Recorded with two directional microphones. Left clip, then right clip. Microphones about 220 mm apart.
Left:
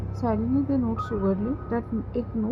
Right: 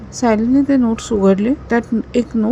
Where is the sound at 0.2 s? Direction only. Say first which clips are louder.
Right 12 dB; 35° right (ahead or behind).